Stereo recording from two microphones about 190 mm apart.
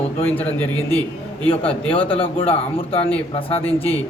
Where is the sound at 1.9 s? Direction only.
30° left (ahead or behind).